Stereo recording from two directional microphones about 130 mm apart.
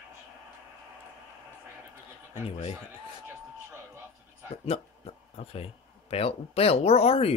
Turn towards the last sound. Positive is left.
turn(degrees=50)  # may be behind; listen again after turning